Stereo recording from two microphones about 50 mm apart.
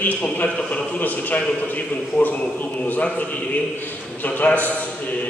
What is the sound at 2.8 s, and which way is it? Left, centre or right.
Speech, left.